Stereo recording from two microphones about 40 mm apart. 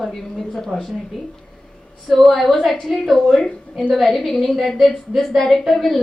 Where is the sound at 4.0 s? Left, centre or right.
Centre.